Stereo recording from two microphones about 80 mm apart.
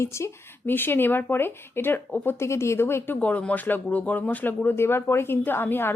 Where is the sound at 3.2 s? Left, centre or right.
Centre.